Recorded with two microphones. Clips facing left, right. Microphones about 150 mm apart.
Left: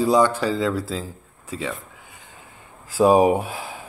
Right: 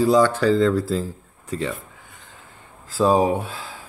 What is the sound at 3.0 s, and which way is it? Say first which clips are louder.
Speech: left 3 dB; 15° left (ahead or behind).